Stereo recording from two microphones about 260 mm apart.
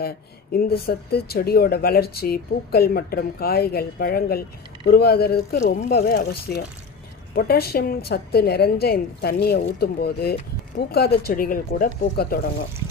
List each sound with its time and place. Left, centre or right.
0.5 s speech: left